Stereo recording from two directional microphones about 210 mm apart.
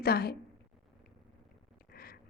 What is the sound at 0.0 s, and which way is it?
Speech, 50° left (ahead or behind).